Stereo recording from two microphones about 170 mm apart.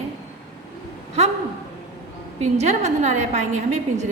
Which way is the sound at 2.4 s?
40° right (ahead or behind).